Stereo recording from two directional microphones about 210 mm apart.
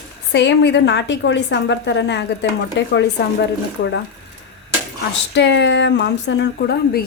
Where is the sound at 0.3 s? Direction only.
55° left (ahead or behind).